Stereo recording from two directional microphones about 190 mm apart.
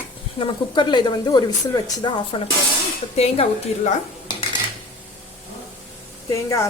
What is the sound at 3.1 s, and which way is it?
Dishes, 30° left (ahead or behind).